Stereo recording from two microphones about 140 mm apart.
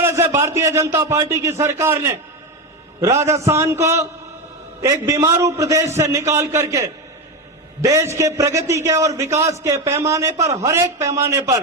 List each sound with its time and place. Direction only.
0.0 s a man's voice: 20° right (ahead or behind)